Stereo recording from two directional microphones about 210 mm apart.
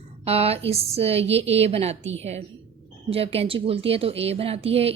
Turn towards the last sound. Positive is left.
turn(degrees=-30)  # may be behind; listen again after turning